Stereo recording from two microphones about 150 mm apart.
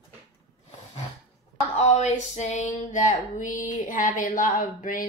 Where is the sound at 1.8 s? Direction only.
50° left (ahead or behind).